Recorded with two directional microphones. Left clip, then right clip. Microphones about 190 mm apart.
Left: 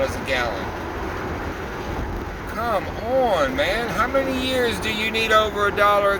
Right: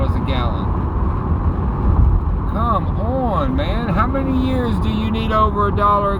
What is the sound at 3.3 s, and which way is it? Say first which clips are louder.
Speech: left 1 dB; 45° left (ahead or behind).